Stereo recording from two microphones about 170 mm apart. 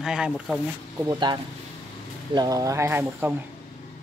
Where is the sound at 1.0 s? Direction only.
25° right (ahead or behind).